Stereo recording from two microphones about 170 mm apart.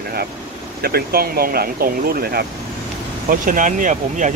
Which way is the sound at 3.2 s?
50° right (ahead or behind).